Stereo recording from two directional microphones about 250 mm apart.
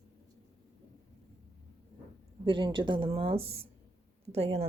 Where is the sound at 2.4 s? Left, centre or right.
Centre.